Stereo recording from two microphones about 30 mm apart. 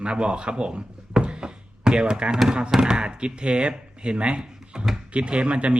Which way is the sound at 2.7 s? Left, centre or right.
Right.